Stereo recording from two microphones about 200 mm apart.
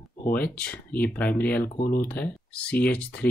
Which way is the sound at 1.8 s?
45° left (ahead or behind).